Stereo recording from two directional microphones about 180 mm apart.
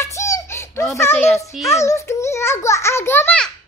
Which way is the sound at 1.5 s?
Centre (ahead or behind).